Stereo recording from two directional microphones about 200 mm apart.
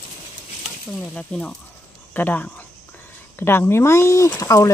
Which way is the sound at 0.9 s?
5° left (ahead or behind).